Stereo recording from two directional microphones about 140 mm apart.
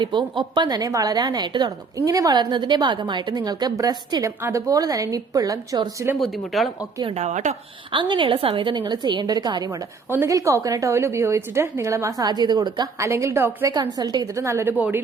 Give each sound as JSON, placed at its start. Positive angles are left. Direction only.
{"t": 0.0, "sound": "a woman's voice", "side_deg": -35}
{"t": 6.1, "sound": "speech", "side_deg": 0}
{"t": 7.0, "sound": "speech", "side_deg": -50}
{"t": 7.9, "sound": "a woman's voice", "side_deg": -35}
{"t": 13.1, "sound": "a woman's voice", "side_deg": -20}
{"t": 13.7, "sound": "a woman's voice", "side_deg": -30}